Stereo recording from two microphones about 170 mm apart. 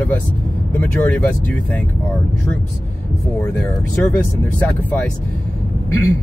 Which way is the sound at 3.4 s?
10° left (ahead or behind).